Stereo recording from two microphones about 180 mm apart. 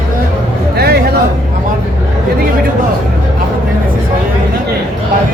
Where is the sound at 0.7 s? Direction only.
60° right (ahead or behind).